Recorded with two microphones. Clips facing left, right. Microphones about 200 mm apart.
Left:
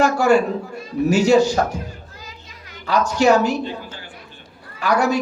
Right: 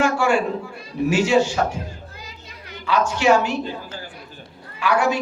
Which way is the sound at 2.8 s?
40° left (ahead or behind).